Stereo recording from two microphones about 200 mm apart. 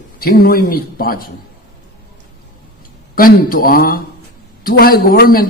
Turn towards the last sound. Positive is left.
turn(degrees=45)  # may be behind; listen again after turning